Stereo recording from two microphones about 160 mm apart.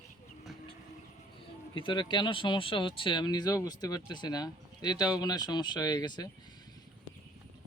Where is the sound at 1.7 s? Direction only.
30° left (ahead or behind).